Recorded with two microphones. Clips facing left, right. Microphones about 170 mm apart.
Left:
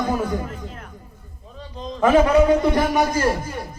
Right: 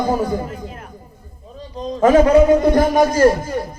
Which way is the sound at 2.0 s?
40° right (ahead or behind).